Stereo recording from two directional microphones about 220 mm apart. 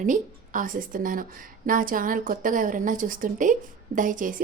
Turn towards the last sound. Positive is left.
turn(degrees=-35)  # may be behind; listen again after turning